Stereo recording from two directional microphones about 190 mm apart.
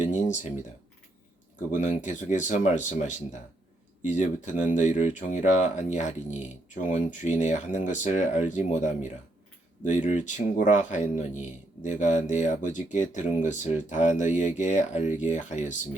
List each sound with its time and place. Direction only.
0.0 s a sound: 40° left (ahead or behind)
1.7 s speech: 40° left (ahead or behind)
4.0 s speech: 40° left (ahead or behind)